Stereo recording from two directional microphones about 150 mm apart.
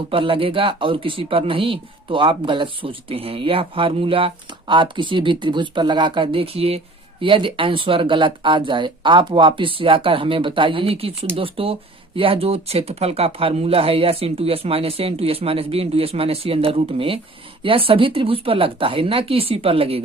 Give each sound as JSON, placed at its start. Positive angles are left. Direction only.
{"t": 0.1, "sound": "speech", "side_deg": -35}